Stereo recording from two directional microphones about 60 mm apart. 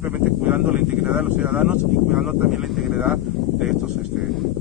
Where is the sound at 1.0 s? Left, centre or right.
Centre.